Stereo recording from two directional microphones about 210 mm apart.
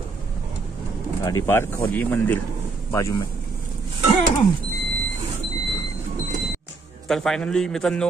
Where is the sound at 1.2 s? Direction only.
15° left (ahead or behind).